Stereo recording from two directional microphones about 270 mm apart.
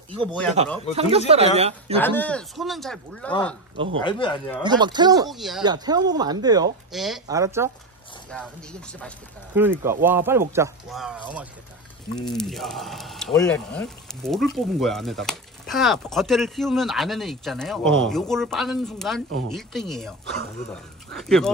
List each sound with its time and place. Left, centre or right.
0.2 s speech: centre
0.9 s speech: right
2.0 s speech: centre
4.0 s speech: centre
4.6 s speech: centre
5.3 s speech: centre
5.6 s speech: centre
6.9 s speech: centre
7.2 s speech: centre
9.5 s speech: centre
21.1 s speech: centre